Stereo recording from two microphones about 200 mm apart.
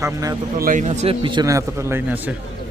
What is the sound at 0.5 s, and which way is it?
A man's voice, 45° right (ahead or behind).